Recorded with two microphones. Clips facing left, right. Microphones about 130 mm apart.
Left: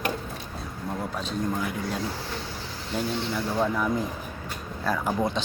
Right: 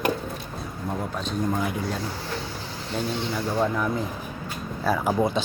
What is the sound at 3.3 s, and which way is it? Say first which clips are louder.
Speech: right 2 dB; 5° right (ahead or behind).